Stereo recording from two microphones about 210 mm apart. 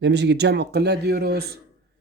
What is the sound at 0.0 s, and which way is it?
Speech, 55° right (ahead or behind).